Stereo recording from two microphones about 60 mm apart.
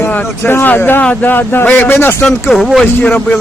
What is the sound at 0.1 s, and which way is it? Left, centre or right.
A man's voice, left.